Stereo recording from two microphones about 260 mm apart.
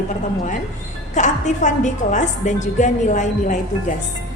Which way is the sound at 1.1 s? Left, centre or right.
Left.